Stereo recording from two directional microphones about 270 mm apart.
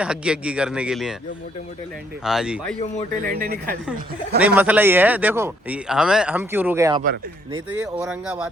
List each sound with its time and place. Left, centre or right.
0.0 s a man's voice: centre
2.2 s a man's voice: centre
3.2 s speech: right
4.4 s a man's voice: centre